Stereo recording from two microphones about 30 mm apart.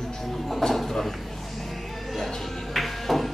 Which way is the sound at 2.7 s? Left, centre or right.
Centre.